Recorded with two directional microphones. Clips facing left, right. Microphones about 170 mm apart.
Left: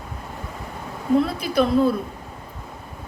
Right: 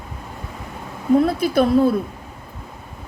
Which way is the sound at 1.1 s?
45° right (ahead or behind).